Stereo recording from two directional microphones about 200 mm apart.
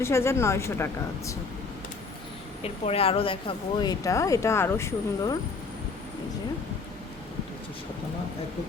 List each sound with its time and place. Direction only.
0.0 s speech: 15° left (ahead or behind)
2.6 s a woman's voice: 30° left (ahead or behind)